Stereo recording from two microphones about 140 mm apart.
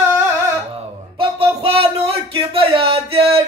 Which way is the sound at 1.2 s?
40° right (ahead or behind).